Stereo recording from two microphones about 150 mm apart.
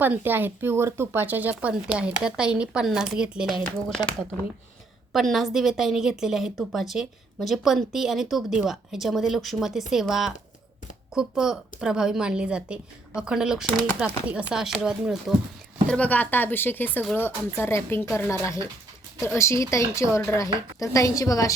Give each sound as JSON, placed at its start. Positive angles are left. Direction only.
{"t": 0.0, "sound": "speech", "side_deg": -15}
{"t": 5.1, "sound": "a woman's voice", "side_deg": 0}
{"t": 15.9, "sound": "speech", "side_deg": 10}